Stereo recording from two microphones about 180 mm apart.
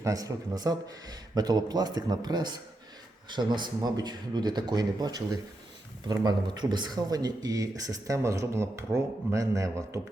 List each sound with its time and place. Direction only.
0.0 s speech: 20° right (ahead or behind)